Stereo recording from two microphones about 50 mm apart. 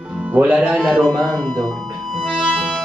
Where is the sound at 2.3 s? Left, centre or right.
Centre.